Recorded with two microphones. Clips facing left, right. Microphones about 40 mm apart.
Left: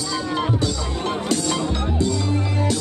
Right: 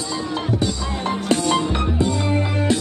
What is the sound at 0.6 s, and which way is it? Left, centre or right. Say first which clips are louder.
Music: right 1 dB; right.